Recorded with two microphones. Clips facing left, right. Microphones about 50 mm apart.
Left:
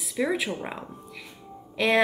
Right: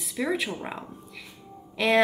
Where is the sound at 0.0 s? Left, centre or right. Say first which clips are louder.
Left 1 dB; centre.